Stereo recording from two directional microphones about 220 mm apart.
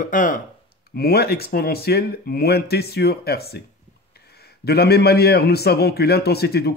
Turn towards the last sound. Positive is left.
turn(degrees=45)  # may be behind; listen again after turning